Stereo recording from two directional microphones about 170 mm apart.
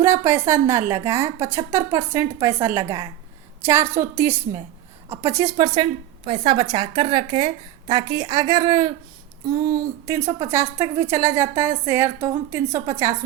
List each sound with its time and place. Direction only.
0.0 s a woman's voice: 15° right (ahead or behind)